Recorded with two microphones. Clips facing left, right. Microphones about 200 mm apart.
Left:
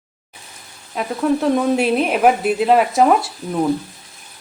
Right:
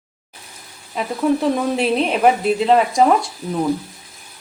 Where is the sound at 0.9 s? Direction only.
Centre (ahead or behind).